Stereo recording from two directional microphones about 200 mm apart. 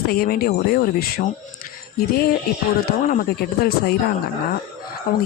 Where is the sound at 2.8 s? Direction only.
45° left (ahead or behind).